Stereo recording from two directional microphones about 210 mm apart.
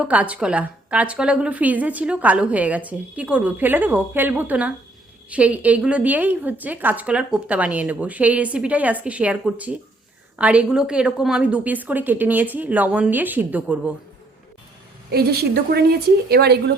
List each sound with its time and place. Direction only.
0.0 s a woman's voice: 5° right (ahead or behind)
15.1 s a woman's voice: 50° right (ahead or behind)